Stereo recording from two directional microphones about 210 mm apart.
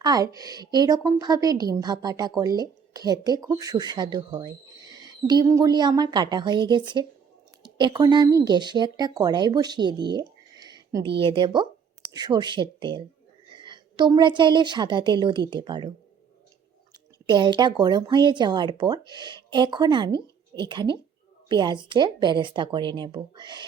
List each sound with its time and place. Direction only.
0.0 s a woman's voice: 20° right (ahead or behind)
10.1 s a sound: 20° right (ahead or behind)
11.2 s a woman's voice: 25° right (ahead or behind)
17.2 s a woman's voice: 20° right (ahead or behind)